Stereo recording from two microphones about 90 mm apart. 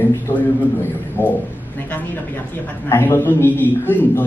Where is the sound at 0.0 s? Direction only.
25° left (ahead or behind).